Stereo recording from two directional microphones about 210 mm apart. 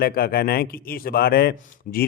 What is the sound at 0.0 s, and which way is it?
A man's voice, 45° left (ahead or behind).